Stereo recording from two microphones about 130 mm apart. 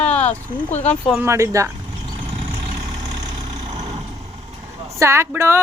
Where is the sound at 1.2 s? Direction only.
20° right (ahead or behind).